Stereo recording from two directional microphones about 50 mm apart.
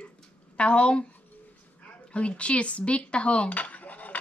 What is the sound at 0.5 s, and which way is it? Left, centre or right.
Speech, left.